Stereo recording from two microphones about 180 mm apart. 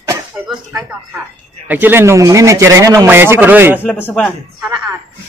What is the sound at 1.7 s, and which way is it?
A man's voice, 10° right (ahead or behind).